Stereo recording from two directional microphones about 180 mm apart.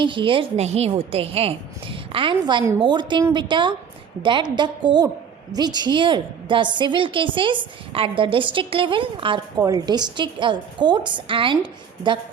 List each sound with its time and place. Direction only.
0.0 s a woman's voice: 25° right (ahead or behind)